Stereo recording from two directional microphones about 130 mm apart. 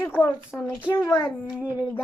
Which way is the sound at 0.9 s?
20° left (ahead or behind).